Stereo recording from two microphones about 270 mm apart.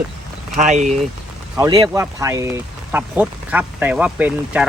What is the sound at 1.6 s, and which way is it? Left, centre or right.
Speech, centre.